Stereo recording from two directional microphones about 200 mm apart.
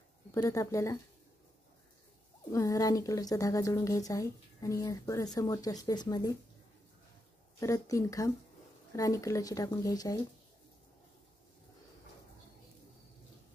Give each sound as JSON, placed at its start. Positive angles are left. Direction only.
{"t": 0.3, "sound": "a woman's voice", "side_deg": 15}
{"t": 2.5, "sound": "a woman's voice", "side_deg": 15}
{"t": 7.6, "sound": "a woman's voice", "side_deg": 15}